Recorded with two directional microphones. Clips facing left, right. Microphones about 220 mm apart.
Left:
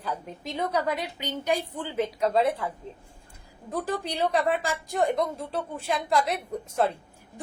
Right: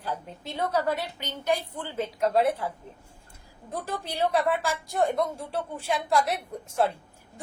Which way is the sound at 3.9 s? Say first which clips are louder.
Even; 15° left (ahead or behind).